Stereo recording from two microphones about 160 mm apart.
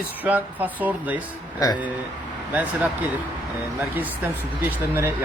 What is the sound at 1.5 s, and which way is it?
Speech, 20° left (ahead or behind).